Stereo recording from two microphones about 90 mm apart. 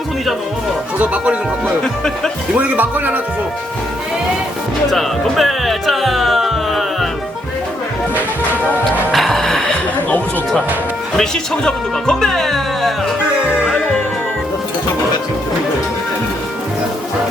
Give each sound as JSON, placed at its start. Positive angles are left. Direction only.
{"t": 0.9, "sound": "speech", "side_deg": -15}
{"t": 1.8, "sound": "speech", "side_deg": 5}
{"t": 2.6, "sound": "speech", "side_deg": -20}
{"t": 4.9, "sound": "speech", "side_deg": 0}
{"t": 9.1, "sound": "music", "side_deg": 5}
{"t": 11.2, "sound": "speech", "side_deg": 10}
{"t": 13.3, "sound": "music", "side_deg": -15}